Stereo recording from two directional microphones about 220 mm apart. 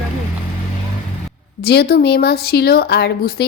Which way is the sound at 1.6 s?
45° left (ahead or behind).